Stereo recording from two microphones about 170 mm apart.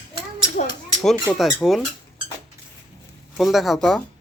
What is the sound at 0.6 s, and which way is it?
Children playing, 50° left (ahead or behind).